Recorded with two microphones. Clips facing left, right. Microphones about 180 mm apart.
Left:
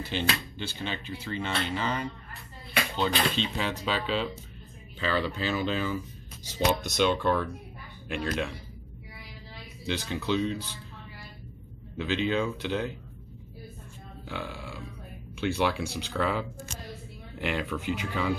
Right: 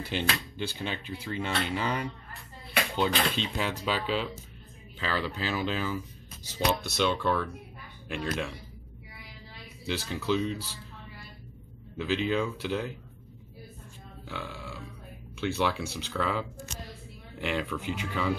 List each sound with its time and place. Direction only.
0.0 s speech: 10° right (ahead or behind)
6.8 s speech: 15° left (ahead or behind)
8.1 s speech: centre (ahead or behind)
9.8 s speech: 5° right (ahead or behind)
12.0 s speech: 5° right (ahead or behind)
14.3 s speech: centre (ahead or behind)